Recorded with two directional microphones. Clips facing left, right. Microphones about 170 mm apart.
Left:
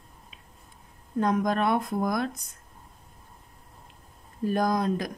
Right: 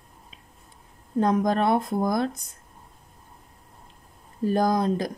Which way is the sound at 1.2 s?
30° right (ahead or behind).